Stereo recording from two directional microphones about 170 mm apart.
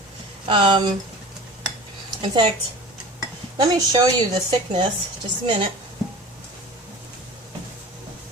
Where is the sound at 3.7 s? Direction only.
20° right (ahead or behind).